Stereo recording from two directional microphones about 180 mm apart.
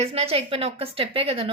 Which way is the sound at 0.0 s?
35° right (ahead or behind).